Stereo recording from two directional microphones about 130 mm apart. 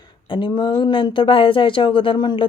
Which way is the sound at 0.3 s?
35° left (ahead or behind).